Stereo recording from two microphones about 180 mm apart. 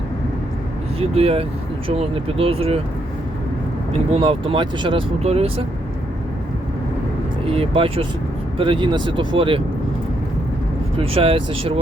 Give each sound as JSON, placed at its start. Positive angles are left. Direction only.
{"t": 0.9, "sound": "speech", "side_deg": -35}
{"t": 3.9, "sound": "speech", "side_deg": -30}
{"t": 7.4, "sound": "speech", "side_deg": -35}
{"t": 10.9, "sound": "speech", "side_deg": -30}